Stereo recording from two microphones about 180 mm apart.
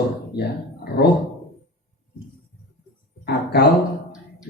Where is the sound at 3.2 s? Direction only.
60° left (ahead or behind).